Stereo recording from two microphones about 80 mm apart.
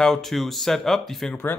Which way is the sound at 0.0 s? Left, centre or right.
Centre.